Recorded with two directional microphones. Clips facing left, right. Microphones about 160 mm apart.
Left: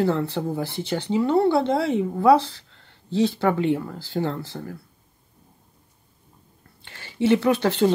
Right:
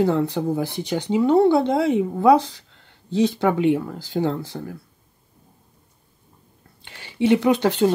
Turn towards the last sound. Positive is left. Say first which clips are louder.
# right 2 dB
turn(degrees=-10)  # may be behind; listen again after turning